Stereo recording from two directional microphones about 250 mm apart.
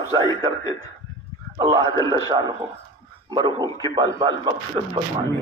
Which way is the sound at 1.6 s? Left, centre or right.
Centre.